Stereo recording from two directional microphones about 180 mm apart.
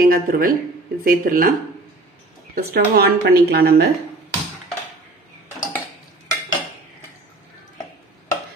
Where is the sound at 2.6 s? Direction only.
60° right (ahead or behind).